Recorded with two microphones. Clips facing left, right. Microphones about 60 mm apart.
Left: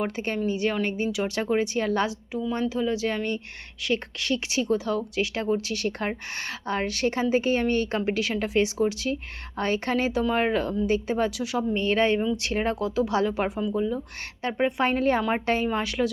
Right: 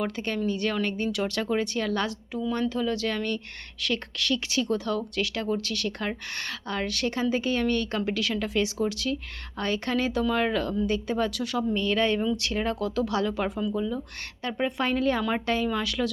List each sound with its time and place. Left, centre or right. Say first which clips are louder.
0.0 s a woman's voice: left 1 dB; left
11.5 s a woman's voice: left 2 dB; left
12.8 s a woman's voice: left 2 dB; centre